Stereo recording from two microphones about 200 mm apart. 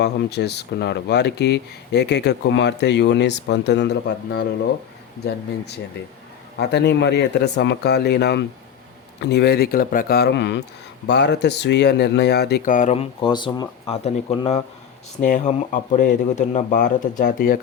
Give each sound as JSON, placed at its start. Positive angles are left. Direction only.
{"t": 0.0, "sound": "speech", "side_deg": 55}